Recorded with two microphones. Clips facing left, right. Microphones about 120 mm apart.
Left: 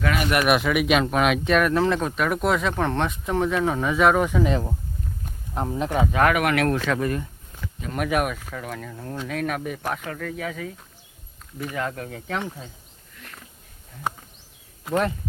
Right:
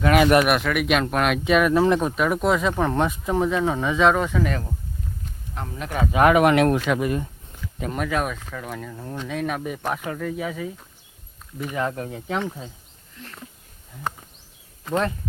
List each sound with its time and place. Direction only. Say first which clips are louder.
0.4 s speech: left 1 dB; 5° left (ahead or behind); by 6.1 s 25° left (ahead or behind)
6.1 s speech: right 7 dB; 15° right (ahead or behind)
7.6 s a sound: left 1 dB; 60° left (ahead or behind)
7.9 s speech: left 2 dB; 10° left (ahead or behind)
9.9 s speech: right 3 dB; 15° right (ahead or behind)
14.1 s a sound: left 1 dB; 10° left (ahead or behind)
14.8 s speech: even; 10° left (ahead or behind)